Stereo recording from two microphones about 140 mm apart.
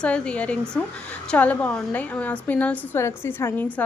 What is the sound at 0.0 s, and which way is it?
A woman's voice, 5° left (ahead or behind).